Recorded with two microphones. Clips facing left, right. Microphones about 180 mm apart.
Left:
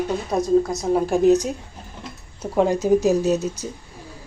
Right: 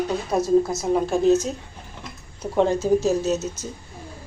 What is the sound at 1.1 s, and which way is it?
Speech, 15° left (ahead or behind).